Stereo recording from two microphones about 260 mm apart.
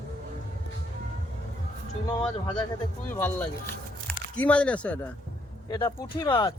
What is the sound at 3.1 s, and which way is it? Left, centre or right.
A man's voice, centre.